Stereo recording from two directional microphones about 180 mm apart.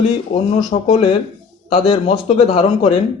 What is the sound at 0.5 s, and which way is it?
Speech, 35° left (ahead or behind).